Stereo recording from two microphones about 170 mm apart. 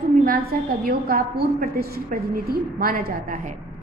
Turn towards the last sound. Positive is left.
turn(degrees=-50)  # may be behind; listen again after turning